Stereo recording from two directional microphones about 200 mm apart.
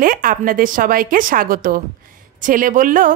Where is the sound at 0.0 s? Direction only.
45° right (ahead or behind).